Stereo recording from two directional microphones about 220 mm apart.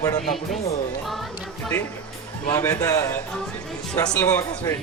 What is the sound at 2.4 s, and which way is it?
Speech, 15° left (ahead or behind).